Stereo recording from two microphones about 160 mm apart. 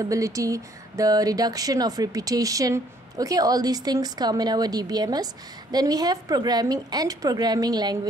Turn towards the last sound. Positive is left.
turn(degrees=-25)  # may be behind; listen again after turning